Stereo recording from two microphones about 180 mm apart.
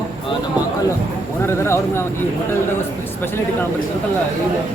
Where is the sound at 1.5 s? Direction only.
15° left (ahead or behind).